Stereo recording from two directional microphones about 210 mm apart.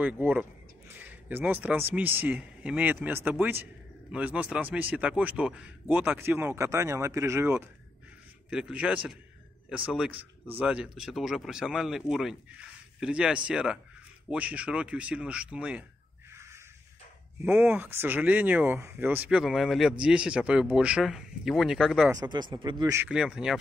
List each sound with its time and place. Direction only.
0.0 s a man's voice: 10° right (ahead or behind)
16.3 s crow: 10° right (ahead or behind)
17.5 s a man's voice: 5° right (ahead or behind)
22.1 s speech: 20° right (ahead or behind)
23.0 s speech: 5° right (ahead or behind)